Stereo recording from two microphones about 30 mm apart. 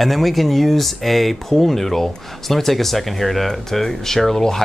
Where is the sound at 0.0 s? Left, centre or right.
Centre.